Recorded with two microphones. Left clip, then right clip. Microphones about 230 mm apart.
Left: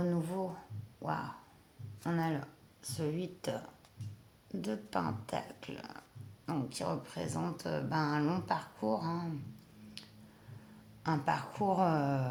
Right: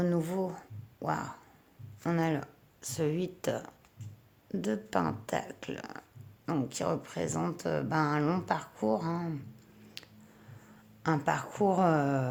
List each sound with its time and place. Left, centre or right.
0.0 s speech: right
2.0 s speech: right
10.0 s finger snapping: right
11.0 s speech: right